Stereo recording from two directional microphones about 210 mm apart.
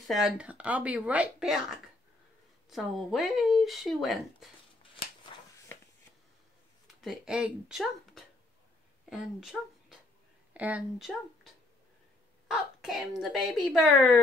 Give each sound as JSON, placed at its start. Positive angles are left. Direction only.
{"t": 0.0, "sound": "speech", "side_deg": 0}
{"t": 2.7, "sound": "speech", "side_deg": 0}
{"t": 5.3, "sound": "a sound", "side_deg": 25}
{"t": 7.0, "sound": "speech", "side_deg": 0}